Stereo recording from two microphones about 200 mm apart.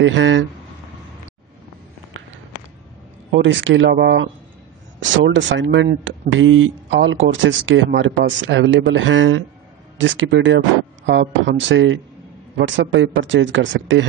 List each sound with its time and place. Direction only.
0.0 s speech: 70° right (ahead or behind)
3.3 s speech: 65° right (ahead or behind)
5.0 s speech: 70° right (ahead or behind)